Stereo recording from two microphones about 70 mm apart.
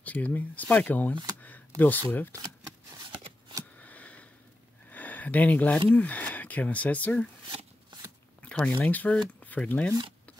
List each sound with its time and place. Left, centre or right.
0.0 s speech: left
2.4 s shuffling cards: right
3.7 s sniff: left
4.8 s a sound: left
5.9 s speech: left
8.4 s a sound: centre
8.7 s speech: left